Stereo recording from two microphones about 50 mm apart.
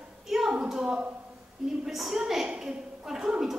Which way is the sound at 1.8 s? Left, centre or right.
Centre.